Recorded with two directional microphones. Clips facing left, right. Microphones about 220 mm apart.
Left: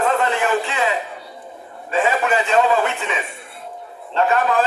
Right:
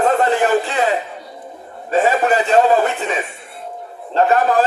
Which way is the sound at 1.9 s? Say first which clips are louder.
Right 4 dB; 35° right (ahead or behind).